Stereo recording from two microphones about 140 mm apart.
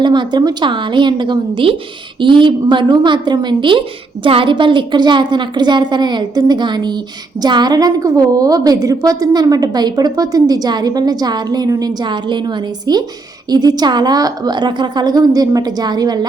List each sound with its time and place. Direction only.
0.0 s a woman's voice: 30° right (ahead or behind)